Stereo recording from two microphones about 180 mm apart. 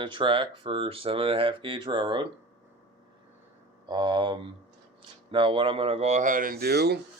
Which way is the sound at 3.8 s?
25° right (ahead or behind).